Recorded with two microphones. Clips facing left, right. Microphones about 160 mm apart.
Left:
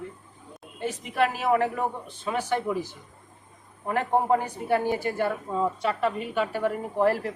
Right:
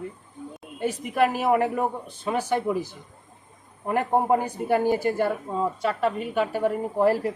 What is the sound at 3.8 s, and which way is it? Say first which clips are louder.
A man's voice: right 2 dB; 10° right (ahead or behind).